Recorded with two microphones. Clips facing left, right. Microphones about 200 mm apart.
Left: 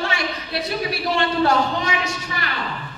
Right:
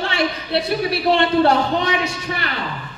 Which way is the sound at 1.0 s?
60° right (ahead or behind).